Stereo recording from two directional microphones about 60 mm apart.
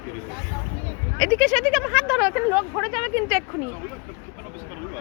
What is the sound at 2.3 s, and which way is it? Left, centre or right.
Speech, right.